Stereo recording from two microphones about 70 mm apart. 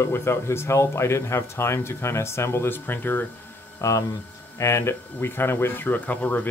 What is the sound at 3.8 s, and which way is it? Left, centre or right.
Speech, left.